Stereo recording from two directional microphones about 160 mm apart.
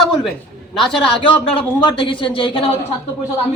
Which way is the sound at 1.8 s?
30° left (ahead or behind).